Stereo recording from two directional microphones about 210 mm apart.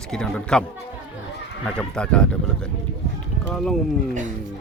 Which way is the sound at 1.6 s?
5° left (ahead or behind).